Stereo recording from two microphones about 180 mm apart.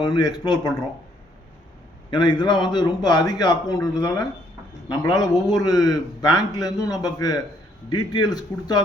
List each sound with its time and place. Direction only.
0.0 s a man's voice: 25° left (ahead or behind)
2.0 s a man's voice: 25° left (ahead or behind)